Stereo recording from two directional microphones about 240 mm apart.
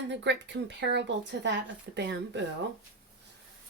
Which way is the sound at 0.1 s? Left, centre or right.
Right.